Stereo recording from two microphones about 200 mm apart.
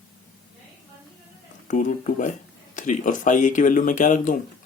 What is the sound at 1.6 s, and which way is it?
Speech, 40° left (ahead or behind).